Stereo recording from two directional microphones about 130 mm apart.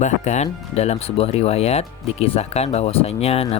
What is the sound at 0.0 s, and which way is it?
Speech, 65° left (ahead or behind).